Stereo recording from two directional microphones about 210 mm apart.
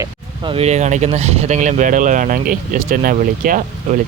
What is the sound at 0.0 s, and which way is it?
Speech, 25° right (ahead or behind).